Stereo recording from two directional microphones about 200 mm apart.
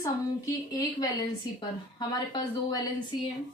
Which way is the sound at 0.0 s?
15° left (ahead or behind).